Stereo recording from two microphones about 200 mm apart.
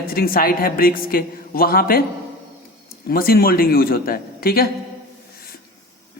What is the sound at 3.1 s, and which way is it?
Speech, 50° left (ahead or behind).